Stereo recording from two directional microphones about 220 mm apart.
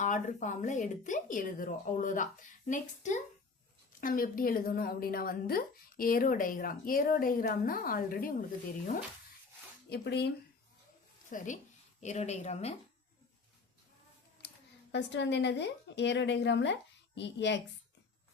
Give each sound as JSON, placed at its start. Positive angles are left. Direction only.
{"t": 0.0, "sound": "a woman's voice", "side_deg": 35}
{"t": 9.9, "sound": "a woman's voice", "side_deg": 50}
{"t": 11.3, "sound": "speech", "side_deg": 35}
{"t": 14.9, "sound": "a woman's voice", "side_deg": 55}